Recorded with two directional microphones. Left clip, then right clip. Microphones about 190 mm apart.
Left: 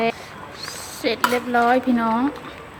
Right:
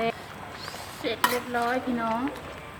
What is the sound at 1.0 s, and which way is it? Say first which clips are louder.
A woman's voice: left 6 dB; 35° left (ahead or behind).